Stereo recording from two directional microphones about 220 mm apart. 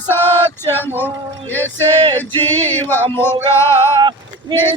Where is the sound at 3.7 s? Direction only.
20° right (ahead or behind).